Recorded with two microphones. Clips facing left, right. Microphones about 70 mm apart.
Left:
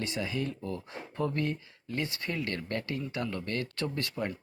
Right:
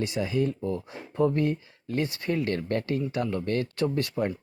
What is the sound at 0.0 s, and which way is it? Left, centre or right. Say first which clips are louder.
Speech: right 6 dB; right.